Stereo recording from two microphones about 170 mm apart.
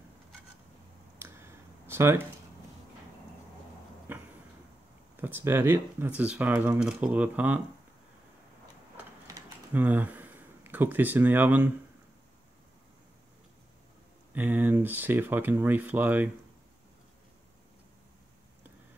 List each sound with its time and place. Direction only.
1.2 s a sound: 15° right (ahead or behind)
4.1 s a sound: 10° right (ahead or behind)
5.1 s speech: 10° right (ahead or behind)
9.3 s typing: 20° right (ahead or behind)
9.8 s speech: 10° right (ahead or behind)
14.3 s speech: 10° right (ahead or behind)